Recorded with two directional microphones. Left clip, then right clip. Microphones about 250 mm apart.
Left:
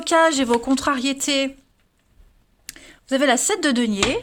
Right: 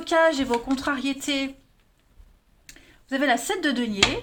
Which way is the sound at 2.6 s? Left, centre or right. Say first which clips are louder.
Left 8 dB; left.